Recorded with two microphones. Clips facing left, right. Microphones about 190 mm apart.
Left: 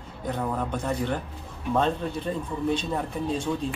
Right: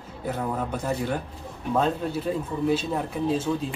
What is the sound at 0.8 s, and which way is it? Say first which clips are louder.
Speech: right 1 dB; 10° right (ahead or behind).